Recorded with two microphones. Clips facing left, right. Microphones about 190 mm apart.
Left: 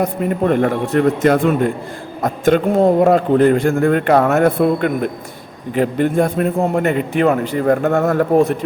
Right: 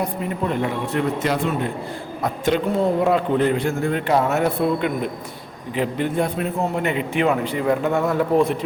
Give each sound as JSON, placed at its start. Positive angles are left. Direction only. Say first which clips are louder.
{"t": 0.0, "sound": "a man's voice", "louder": "left 7 dB", "side_deg": 55}